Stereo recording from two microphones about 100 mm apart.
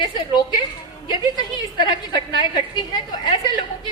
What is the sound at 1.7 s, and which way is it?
A woman's voice, 50° left (ahead or behind).